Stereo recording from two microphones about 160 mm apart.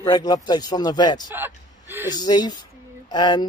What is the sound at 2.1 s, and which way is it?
Speech, 25° left (ahead or behind).